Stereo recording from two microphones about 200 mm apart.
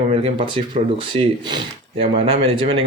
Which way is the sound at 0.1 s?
30° right (ahead or behind).